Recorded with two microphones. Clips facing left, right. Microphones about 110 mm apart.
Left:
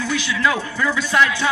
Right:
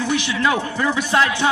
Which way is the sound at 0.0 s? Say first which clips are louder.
Right 1 dB; 20° right (ahead or behind).